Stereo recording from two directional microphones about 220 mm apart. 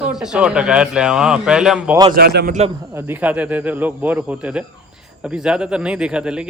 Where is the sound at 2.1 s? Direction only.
45° right (ahead or behind).